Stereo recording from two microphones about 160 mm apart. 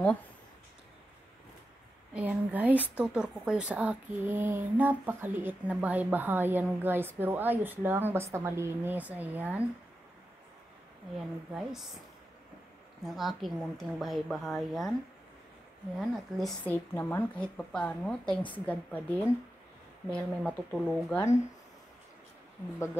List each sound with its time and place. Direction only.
2.1 s speech: 10° right (ahead or behind)
11.5 s a woman's voice: centre (ahead or behind)
13.0 s a woman's voice: centre (ahead or behind)
16.0 s a woman's voice: centre (ahead or behind)
16.6 s a woman's voice: 10° left (ahead or behind)